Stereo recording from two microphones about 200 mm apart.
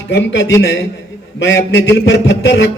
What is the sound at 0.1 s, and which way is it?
A man's voice, 60° left (ahead or behind).